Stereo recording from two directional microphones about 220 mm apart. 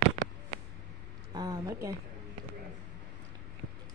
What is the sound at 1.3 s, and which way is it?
Speech, 15° right (ahead or behind).